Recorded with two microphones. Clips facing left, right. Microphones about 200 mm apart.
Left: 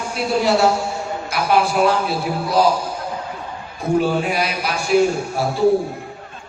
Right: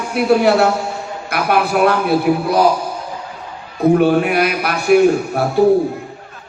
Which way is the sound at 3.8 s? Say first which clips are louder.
Right 6 dB; 60° right (ahead or behind).